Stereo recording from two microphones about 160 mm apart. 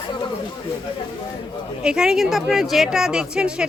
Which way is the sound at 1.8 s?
5° right (ahead or behind).